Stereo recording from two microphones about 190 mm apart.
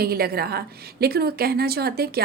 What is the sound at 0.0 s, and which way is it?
A woman's voice, 55° right (ahead or behind).